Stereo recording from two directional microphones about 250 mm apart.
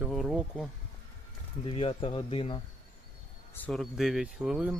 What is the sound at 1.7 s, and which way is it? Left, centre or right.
Speech, left.